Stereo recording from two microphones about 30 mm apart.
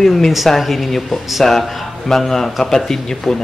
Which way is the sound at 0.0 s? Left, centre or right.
Centre.